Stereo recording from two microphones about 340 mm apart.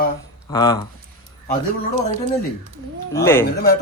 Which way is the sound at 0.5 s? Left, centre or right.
Centre.